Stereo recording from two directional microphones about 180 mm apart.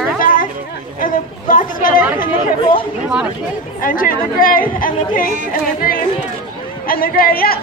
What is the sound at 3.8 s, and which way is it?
A woman's voice, 50° left (ahead or behind).